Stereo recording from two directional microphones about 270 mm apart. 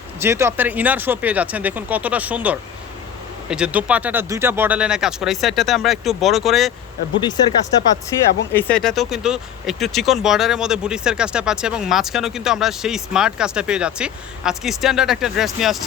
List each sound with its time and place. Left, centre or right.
0.2 s speech: centre
7.2 s speech: centre
8.5 s speech: centre